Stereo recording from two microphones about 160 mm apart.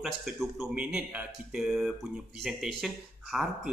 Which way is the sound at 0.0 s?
Centre (ahead or behind).